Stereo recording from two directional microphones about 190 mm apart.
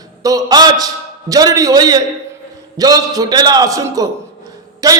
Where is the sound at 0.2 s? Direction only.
20° right (ahead or behind).